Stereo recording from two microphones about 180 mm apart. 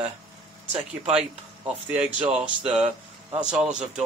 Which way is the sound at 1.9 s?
5° right (ahead or behind).